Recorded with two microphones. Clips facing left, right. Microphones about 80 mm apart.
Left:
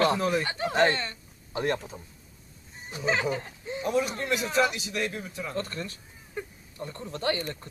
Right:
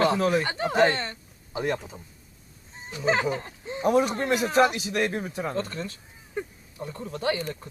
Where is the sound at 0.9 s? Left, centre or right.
Right.